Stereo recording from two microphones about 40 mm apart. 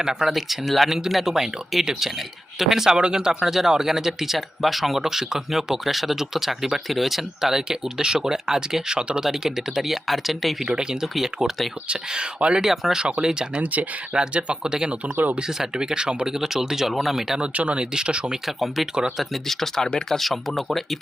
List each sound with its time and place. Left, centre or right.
0.0 s speech: centre
0.3 s speech: centre
0.9 s speech: centre
10.7 s speech: right
11.0 s speech: centre
11.9 s speech: right
12.6 s speech: centre
13.2 s speech: centre
13.6 s speech: right
14.1 s speech: right; by 17.4 s centre
17.4 s speech: right
17.9 s speech: right
18.4 s speech: centre
20.1 s speech: centre